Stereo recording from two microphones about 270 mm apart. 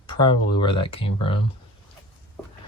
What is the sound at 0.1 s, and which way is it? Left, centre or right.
Speech, centre.